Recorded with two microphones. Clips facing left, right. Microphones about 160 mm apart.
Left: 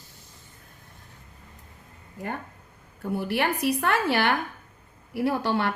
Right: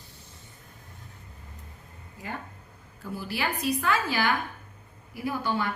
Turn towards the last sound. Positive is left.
turn(degrees=70)  # may be behind; listen again after turning